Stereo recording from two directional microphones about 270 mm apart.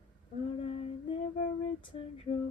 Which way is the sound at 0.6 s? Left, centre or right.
Centre.